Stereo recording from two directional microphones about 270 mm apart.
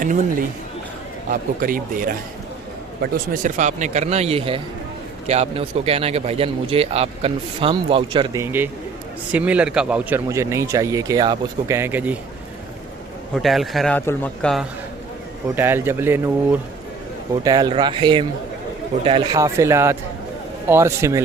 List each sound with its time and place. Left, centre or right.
0.0 s a man's voice: right; by 12.1 s centre
13.3 s a man's voice: centre